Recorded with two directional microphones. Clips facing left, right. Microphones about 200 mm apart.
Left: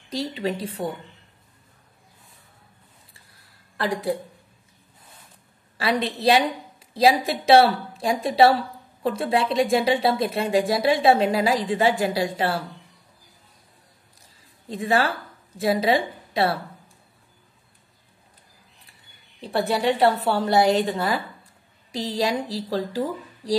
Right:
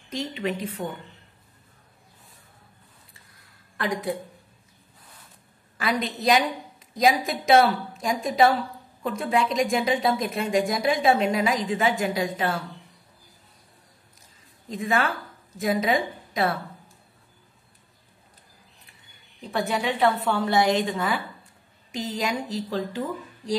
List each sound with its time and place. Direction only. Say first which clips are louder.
0.1 s speech: left 2 dB; 35° left (ahead or behind)
3.7 s a woman's voice: left 3 dB; 30° left (ahead or behind)
5.8 s speech: left 3 dB; 30° left (ahead or behind)
14.7 s a woman's voice: left 3 dB; 35° left (ahead or behind)
19.7 s speech: left 3 dB; 35° left (ahead or behind)